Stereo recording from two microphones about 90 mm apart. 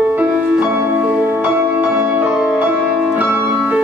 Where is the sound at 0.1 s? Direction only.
15° right (ahead or behind).